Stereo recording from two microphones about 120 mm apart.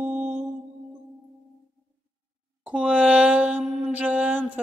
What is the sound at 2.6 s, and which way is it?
Mantra, 10° right (ahead or behind).